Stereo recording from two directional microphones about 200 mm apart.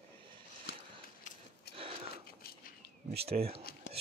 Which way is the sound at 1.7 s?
30° right (ahead or behind).